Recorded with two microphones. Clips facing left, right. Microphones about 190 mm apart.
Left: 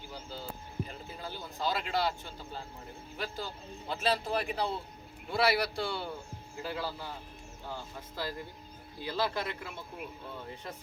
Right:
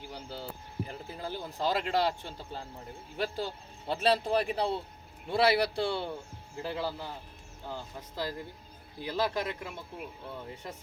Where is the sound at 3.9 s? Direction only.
35° right (ahead or behind); by 9.4 s 15° right (ahead or behind).